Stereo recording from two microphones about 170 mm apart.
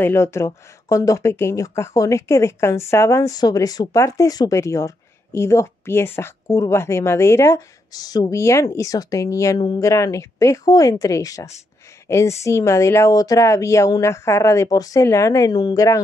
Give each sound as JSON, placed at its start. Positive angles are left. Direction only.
{"t": 0.0, "sound": "a woman's voice", "side_deg": 15}